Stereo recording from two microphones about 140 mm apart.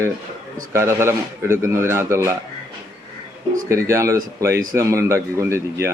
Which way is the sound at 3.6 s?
20° right (ahead or behind).